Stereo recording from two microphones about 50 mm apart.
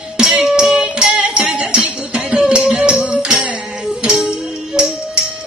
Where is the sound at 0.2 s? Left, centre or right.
Centre.